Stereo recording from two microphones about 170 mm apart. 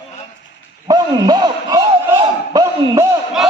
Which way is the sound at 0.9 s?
25° right (ahead or behind).